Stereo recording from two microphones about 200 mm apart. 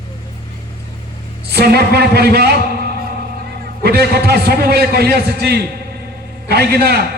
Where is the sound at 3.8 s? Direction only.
55° right (ahead or behind).